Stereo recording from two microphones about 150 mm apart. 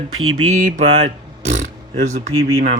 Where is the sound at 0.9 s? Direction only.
50° right (ahead or behind).